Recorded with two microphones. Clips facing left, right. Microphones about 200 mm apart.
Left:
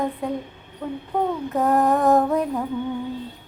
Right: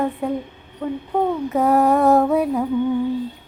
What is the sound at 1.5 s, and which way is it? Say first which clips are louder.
Female singing: right 3 dB; 10° right (ahead or behind).